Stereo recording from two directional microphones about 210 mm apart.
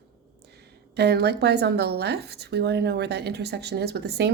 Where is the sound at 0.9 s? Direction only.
50° right (ahead or behind).